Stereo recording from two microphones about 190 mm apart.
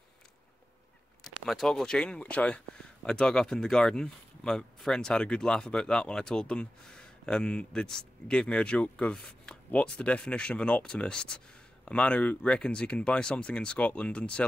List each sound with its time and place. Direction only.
1.2 s speech: centre (ahead or behind)